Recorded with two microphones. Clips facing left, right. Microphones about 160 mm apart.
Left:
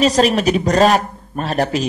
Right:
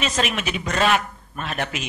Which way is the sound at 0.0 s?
35° left (ahead or behind).